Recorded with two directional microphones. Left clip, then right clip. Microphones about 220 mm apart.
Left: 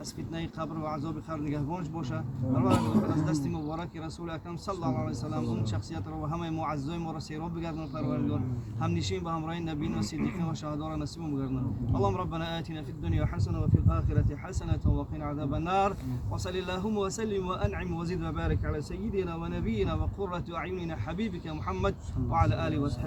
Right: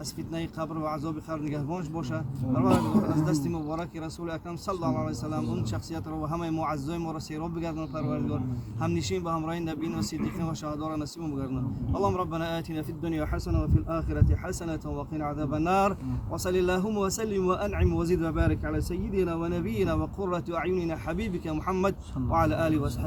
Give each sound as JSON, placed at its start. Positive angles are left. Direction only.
{"t": 0.3, "sound": "speech", "side_deg": -50}